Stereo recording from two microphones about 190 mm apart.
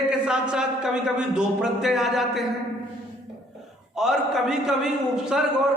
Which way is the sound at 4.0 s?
Centre (ahead or behind).